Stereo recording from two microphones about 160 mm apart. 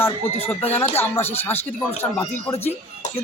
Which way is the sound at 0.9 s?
15° left (ahead or behind).